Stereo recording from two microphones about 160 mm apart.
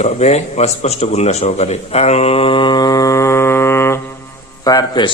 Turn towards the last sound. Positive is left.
turn(degrees=25)  # may be behind; listen again after turning